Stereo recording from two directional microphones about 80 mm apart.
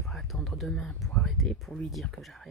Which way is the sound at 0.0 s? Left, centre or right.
Centre.